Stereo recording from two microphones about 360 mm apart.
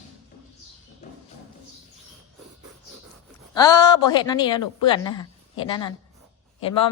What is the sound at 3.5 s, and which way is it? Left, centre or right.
A woman's voice, centre.